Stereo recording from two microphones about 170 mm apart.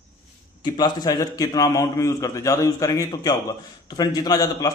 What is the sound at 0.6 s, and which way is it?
A man's voice, 25° left (ahead or behind).